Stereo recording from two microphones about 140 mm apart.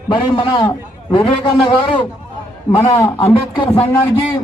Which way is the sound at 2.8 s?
15° left (ahead or behind).